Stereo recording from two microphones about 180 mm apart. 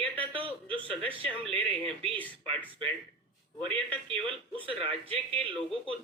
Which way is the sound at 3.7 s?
5° left (ahead or behind).